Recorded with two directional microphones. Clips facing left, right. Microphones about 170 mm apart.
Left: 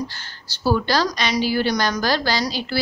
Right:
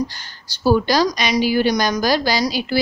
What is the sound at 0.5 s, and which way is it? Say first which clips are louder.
A woman's voice: right 4 dB; 15° right (ahead or behind).